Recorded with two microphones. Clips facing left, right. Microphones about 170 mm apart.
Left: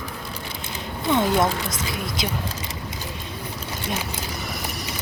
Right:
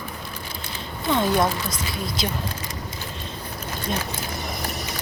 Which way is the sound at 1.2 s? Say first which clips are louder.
Even; 20° left (ahead or behind).